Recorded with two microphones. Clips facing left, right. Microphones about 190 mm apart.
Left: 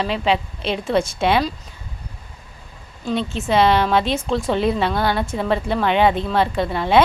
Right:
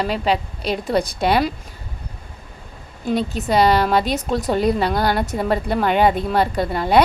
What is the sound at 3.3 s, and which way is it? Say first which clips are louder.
Speech: even; 40° right (ahead or behind).